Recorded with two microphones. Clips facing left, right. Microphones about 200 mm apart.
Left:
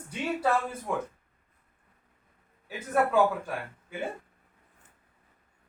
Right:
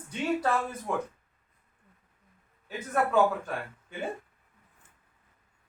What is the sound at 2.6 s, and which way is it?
A man's voice, 10° left (ahead or behind).